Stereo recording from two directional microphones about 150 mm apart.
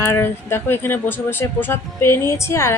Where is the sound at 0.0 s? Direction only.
15° left (ahead or behind).